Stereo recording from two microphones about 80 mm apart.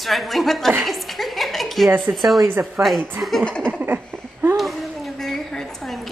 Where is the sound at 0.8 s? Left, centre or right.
Centre.